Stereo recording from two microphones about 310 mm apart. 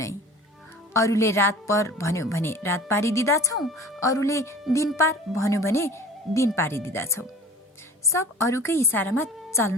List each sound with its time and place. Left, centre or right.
0.9 s a woman's voice: centre